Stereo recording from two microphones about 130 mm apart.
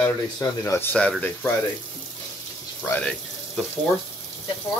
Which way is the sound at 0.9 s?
10° left (ahead or behind).